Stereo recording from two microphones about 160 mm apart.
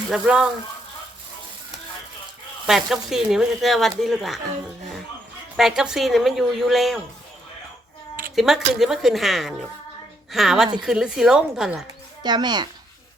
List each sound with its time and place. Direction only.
0.1 s speech: 5° right (ahead or behind)
2.6 s speech: centre (ahead or behind)
5.5 s speech: centre (ahead or behind)
8.4 s speech: centre (ahead or behind)
12.2 s speech: 25° right (ahead or behind)